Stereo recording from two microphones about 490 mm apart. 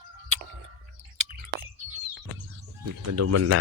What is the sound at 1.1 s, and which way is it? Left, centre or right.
Chewing, right.